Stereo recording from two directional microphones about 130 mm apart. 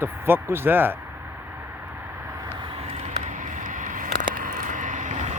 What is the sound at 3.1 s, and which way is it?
Vehicle, 75° right (ahead or behind).